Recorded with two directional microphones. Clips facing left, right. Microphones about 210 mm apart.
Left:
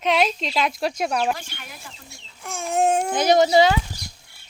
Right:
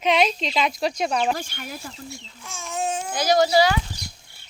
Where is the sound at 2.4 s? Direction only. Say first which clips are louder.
Left 7 dB; 60° left (ahead or behind).